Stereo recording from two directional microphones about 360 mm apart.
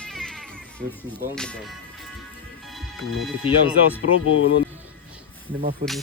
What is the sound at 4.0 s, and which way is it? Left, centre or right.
Speech, left.